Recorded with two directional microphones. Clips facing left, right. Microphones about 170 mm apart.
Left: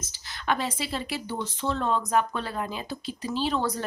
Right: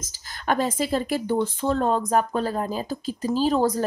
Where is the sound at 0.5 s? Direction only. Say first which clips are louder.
Right 6 dB; 45° right (ahead or behind).